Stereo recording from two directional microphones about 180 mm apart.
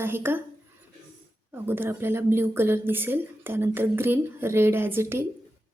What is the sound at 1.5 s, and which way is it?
A woman's voice, 10° right (ahead or behind).